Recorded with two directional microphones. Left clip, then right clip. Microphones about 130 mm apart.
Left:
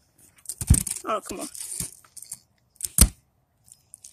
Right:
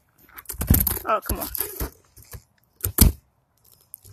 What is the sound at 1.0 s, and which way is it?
Speech, 45° left (ahead or behind).